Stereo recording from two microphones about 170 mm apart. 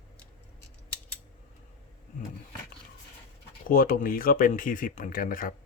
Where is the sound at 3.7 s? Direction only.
55° left (ahead or behind).